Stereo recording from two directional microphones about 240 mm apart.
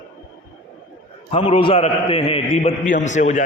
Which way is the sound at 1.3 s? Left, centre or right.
Left.